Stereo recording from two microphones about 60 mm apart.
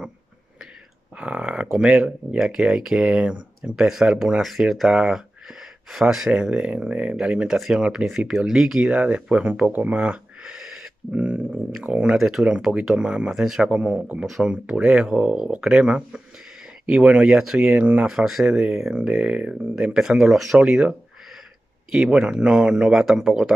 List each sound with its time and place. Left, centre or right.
1.1 s speech: right
6.3 s speech: centre
12.2 s speech: centre
12.4 s speech: centre
13.3 s speech: centre
13.7 s speech: right
14.4 s speech: centre
18.0 s speech: centre
20.5 s speech: centre
22.1 s speech: centre